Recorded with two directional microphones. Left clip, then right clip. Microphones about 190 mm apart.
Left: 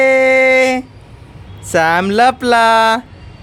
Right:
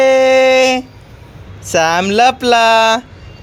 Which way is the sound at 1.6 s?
15° left (ahead or behind).